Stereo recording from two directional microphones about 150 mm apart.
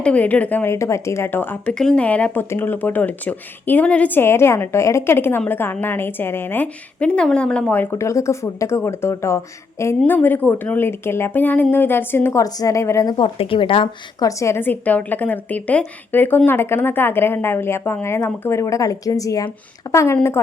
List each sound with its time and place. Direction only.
0.0 s a woman's voice: 10° left (ahead or behind)
13.1 s a woman's voice: 35° left (ahead or behind)
14.3 s a woman's voice: 20° left (ahead or behind)